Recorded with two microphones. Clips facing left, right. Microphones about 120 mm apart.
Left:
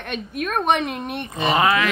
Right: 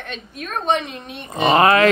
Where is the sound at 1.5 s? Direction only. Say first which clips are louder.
Right 5 dB; 55° right (ahead or behind).